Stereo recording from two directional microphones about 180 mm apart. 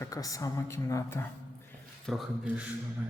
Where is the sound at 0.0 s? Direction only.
20° left (ahead or behind).